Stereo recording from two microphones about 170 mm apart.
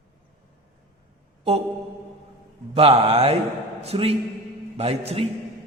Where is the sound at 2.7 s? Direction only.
35° right (ahead or behind).